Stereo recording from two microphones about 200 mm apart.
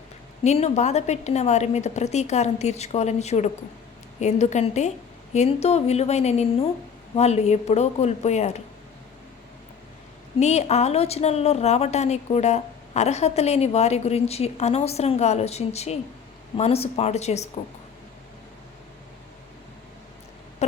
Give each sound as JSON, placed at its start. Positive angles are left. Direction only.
{"t": 0.4, "sound": "a woman's voice", "side_deg": 35}
{"t": 10.4, "sound": "a woman's voice", "side_deg": 35}
{"t": 20.6, "sound": "a woman's voice", "side_deg": 35}